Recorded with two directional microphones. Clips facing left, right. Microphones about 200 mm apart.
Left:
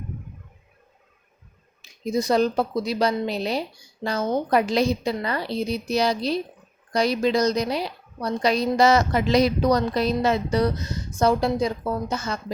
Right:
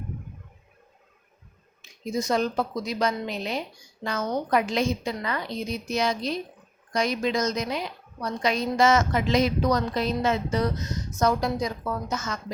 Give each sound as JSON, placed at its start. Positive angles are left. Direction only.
{"t": 1.8, "sound": "a woman's voice", "side_deg": 35}